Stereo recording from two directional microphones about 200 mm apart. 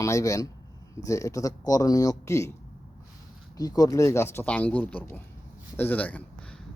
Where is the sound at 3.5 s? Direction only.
20° left (ahead or behind).